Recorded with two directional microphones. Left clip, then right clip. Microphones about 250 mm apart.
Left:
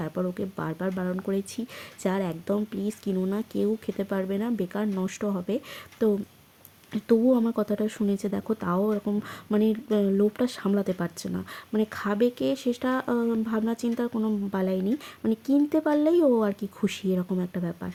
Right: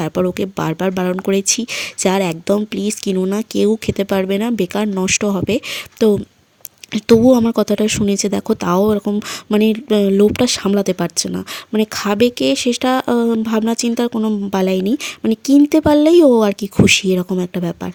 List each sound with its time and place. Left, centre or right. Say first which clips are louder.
0.0 s speech: right 13 dB; right